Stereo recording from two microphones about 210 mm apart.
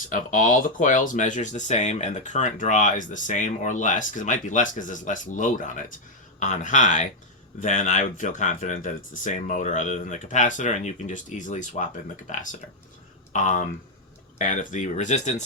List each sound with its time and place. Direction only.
0.1 s speech: 40° left (ahead or behind)